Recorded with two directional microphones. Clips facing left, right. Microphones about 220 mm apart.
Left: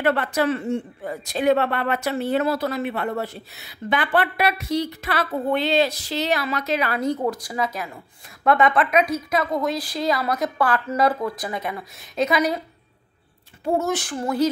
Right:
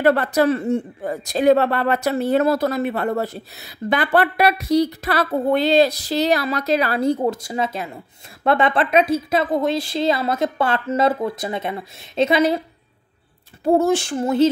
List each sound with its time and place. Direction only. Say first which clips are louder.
0.0 s a woman's voice: right 5 dB; 40° right (ahead or behind)
13.7 s a woman's voice: right 6 dB; 30° right (ahead or behind)